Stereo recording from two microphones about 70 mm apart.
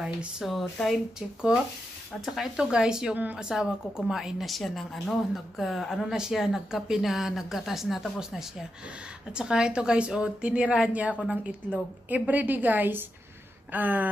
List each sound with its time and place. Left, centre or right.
0.4 s speech: centre
2.2 s a woman's voice: centre; by 13.0 s right
13.7 s a sound: right